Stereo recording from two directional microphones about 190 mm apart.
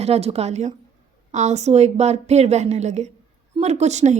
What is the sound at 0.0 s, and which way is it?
A woman's voice, 30° right (ahead or behind).